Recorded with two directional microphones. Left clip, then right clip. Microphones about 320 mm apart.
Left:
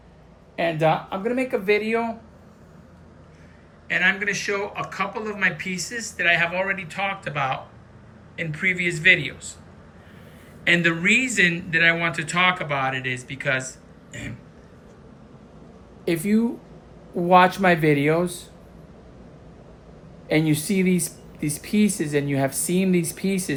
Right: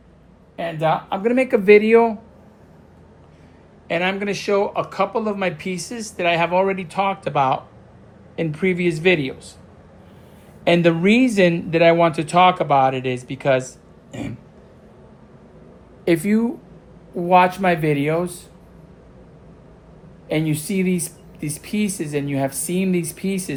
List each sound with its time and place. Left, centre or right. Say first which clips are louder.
0.6 s speech: even; centre
1.1 s speech: right 6 dB; centre
3.8 s speech: left 1 dB; centre
10.6 s speech: right 3 dB; centre
14.1 s throat clearing: right 4 dB; centre
16.0 s speech: right 4 dB; centre
17.2 s speech: right 1 dB; centre
20.2 s speech: left 1 dB; centre